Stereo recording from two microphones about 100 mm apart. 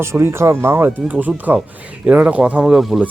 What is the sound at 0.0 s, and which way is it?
Speech, 25° right (ahead or behind).